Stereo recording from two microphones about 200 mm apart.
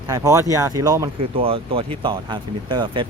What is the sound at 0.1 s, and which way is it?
Speech, 15° right (ahead or behind).